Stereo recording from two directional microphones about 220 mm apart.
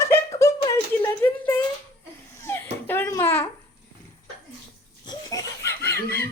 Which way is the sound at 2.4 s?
10° left (ahead or behind).